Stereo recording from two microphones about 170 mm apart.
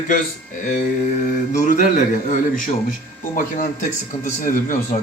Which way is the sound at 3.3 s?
55° left (ahead or behind).